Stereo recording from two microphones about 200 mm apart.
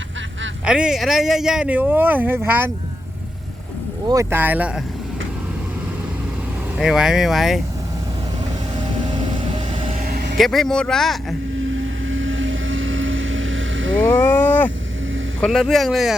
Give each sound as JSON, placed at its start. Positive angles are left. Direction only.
{"t": 0.6, "sound": "speech", "side_deg": -5}
{"t": 4.0, "sound": "speech", "side_deg": -15}
{"t": 6.7, "sound": "speech", "side_deg": -5}
{"t": 9.0, "sound": "vehicle", "side_deg": -25}
{"t": 10.1, "sound": "vehicle", "side_deg": -50}
{"t": 10.3, "sound": "speech", "side_deg": 0}
{"t": 11.6, "sound": "vehicle", "side_deg": -75}
{"t": 14.1, "sound": "speech", "side_deg": 10}